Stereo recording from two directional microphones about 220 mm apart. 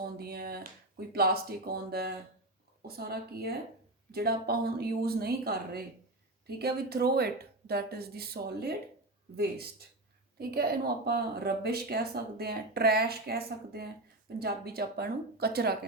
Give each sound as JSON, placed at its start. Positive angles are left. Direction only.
{"t": 0.0, "sound": "speech", "side_deg": -45}